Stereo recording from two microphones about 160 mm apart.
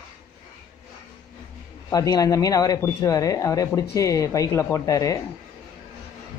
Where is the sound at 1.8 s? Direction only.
25° left (ahead or behind).